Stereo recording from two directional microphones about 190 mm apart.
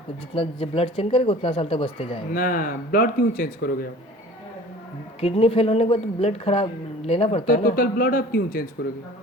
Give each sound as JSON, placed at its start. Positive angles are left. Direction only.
{"t": 0.3, "sound": "speech", "side_deg": 30}
{"t": 2.3, "sound": "speech", "side_deg": 45}
{"t": 5.2, "sound": "speech", "side_deg": 30}
{"t": 7.4, "sound": "speech", "side_deg": 50}